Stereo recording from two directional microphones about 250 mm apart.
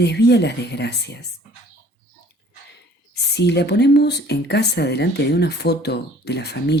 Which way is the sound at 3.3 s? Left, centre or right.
Left.